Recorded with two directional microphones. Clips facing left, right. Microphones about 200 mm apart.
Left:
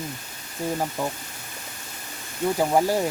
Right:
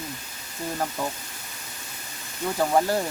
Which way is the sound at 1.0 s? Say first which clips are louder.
Left 2 dB; 10° left (ahead or behind).